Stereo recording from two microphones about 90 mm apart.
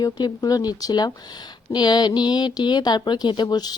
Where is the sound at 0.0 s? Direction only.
45° left (ahead or behind).